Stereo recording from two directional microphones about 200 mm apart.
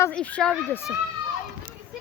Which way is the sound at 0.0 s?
5° left (ahead or behind).